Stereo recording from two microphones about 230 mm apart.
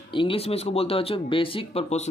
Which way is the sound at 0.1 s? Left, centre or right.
Left.